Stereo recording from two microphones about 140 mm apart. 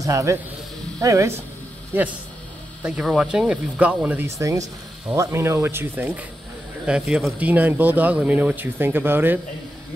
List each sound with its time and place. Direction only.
0.0 s speech: 20° right (ahead or behind)
2.8 s speech: 5° right (ahead or behind)
6.9 s speech: centre (ahead or behind)